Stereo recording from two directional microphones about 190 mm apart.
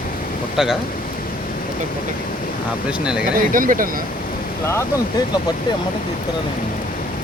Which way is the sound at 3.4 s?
45° right (ahead or behind).